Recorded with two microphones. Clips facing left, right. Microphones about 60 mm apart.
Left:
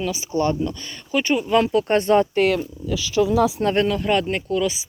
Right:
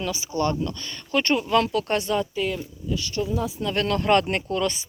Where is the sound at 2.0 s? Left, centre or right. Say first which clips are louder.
Left 8 dB; left.